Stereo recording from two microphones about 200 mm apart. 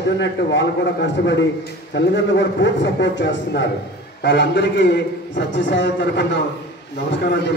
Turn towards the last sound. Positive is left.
turn(degrees=60)  # may be behind; listen again after turning